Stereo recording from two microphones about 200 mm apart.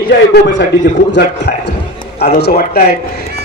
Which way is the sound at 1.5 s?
50° left (ahead or behind).